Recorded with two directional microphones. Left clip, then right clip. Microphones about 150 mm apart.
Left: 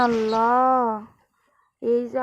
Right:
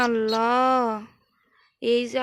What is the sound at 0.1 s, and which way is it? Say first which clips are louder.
Speech: left 2 dB; 25° right (ahead or behind).